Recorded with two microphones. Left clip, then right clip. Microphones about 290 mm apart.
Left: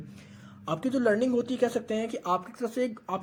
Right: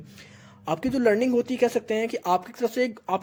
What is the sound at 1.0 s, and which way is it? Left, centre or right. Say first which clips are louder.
Speech: right 4 dB; right.